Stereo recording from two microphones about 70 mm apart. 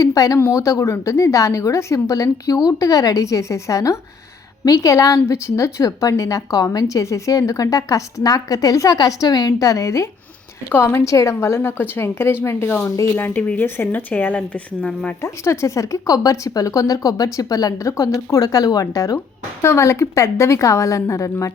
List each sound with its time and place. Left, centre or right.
0.0 s a sound: left
0.5 s a woman's voice: left
10.7 s a woman's voice: left
11.0 s a woman's voice: left; by 15.1 s centre
15.2 s a woman's voice: left